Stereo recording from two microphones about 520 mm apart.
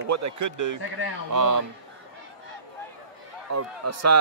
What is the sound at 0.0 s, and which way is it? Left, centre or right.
A man's voice, right.